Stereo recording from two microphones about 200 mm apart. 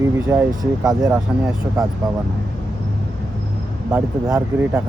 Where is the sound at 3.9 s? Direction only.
10° right (ahead or behind).